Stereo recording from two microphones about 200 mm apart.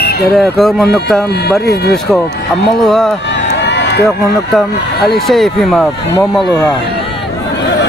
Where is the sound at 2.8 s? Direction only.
5° left (ahead or behind).